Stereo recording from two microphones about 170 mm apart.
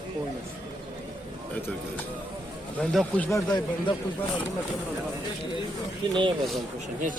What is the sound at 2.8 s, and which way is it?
Speech, 5° left (ahead or behind).